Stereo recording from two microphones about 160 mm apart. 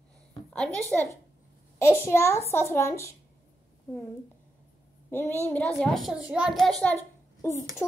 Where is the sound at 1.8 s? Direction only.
15° left (ahead or behind).